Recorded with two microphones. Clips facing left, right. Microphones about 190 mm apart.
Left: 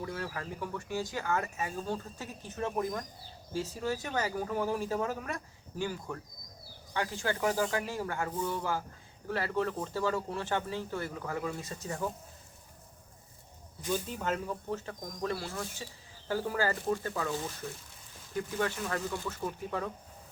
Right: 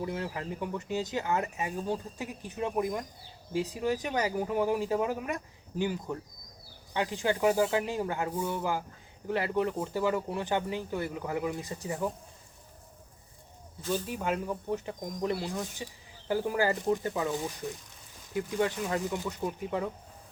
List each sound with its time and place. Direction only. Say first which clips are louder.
0.0 s speech: right 3 dB; 20° right (ahead or behind)
13.9 s speech: right 2 dB; 10° right (ahead or behind)